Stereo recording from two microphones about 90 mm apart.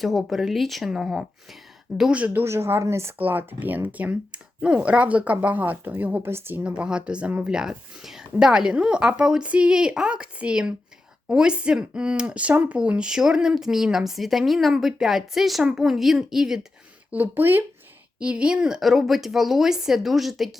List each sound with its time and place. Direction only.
0.0 s speech: centre (ahead or behind)
2.4 s speech: 30° right (ahead or behind)
3.2 s speech: 20° right (ahead or behind)
17.1 s speech: 20° right (ahead or behind); by 20.6 s centre (ahead or behind)